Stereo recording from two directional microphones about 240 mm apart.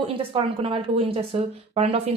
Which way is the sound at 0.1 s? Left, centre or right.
Right.